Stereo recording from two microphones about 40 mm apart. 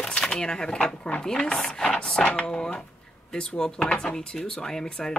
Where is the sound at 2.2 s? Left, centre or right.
Left.